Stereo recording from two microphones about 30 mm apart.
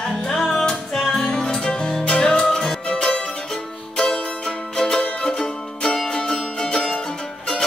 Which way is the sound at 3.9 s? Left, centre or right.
Left.